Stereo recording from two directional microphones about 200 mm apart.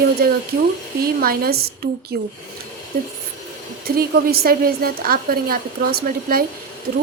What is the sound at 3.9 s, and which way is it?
Speech, 50° right (ahead or behind).